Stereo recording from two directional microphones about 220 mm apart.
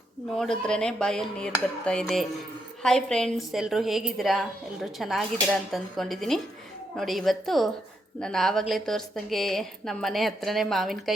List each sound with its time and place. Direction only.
0.3 s a woman's voice: 5° left (ahead or behind)